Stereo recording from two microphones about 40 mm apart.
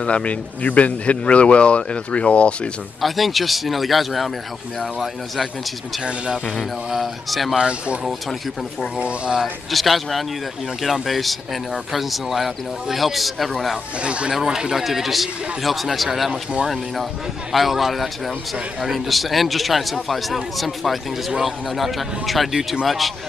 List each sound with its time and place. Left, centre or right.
0.0 s speech: left
3.0 s speech: centre
7.2 s speech: centre
7.5 s speech: right
9.7 s speech: centre
14.0 s speech: right
14.3 s speech: centre
17.5 s speech: centre